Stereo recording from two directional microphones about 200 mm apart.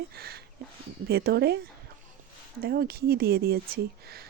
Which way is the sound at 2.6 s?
50° right (ahead or behind).